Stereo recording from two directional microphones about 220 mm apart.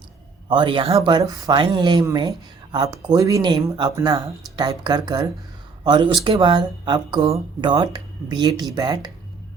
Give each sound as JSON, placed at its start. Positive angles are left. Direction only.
{"t": 0.4, "sound": "speech", "side_deg": -20}